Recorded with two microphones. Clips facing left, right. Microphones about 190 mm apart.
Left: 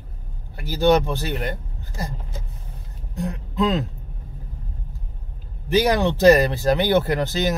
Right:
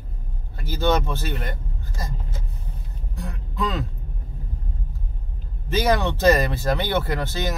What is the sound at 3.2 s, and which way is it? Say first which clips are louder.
Speech: left 6 dB; 20° left (ahead or behind).